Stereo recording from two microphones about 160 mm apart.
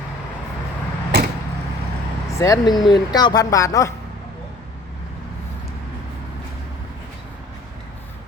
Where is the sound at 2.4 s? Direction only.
25° left (ahead or behind).